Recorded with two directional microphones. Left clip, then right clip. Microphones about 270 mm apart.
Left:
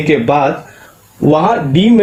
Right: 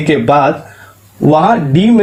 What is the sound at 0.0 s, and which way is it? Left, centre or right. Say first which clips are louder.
Speech: right 2 dB; right.